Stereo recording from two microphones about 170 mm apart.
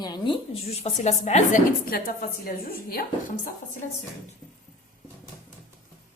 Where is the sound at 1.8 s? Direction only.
60° left (ahead or behind).